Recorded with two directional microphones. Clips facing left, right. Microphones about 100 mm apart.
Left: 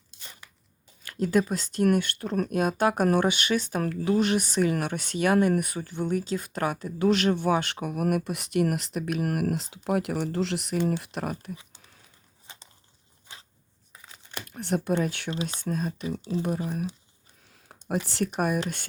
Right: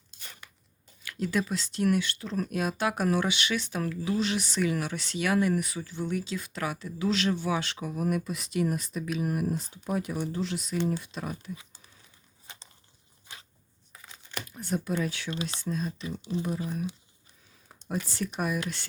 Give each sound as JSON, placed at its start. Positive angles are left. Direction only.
{"t": 1.0, "sound": "speech", "side_deg": 45}
{"t": 14.4, "sound": "speech", "side_deg": 65}
{"t": 16.0, "sound": "speech", "side_deg": 35}
{"t": 18.3, "sound": "speech", "side_deg": 50}